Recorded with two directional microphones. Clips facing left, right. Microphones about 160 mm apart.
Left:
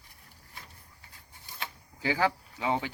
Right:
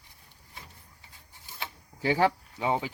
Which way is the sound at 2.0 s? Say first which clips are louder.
Right 3 dB; 20° right (ahead or behind).